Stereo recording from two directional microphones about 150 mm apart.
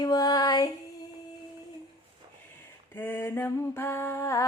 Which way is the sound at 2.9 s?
15° left (ahead or behind).